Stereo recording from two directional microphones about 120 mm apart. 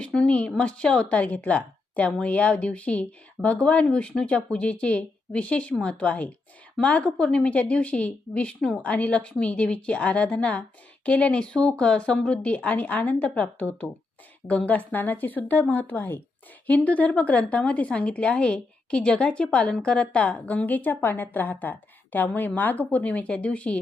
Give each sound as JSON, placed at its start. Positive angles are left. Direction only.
{"t": 0.0, "sound": "a woman's voice", "side_deg": 10}